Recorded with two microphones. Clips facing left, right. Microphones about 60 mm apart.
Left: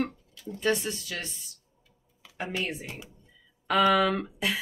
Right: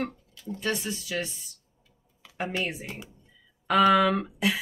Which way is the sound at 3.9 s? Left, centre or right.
Centre.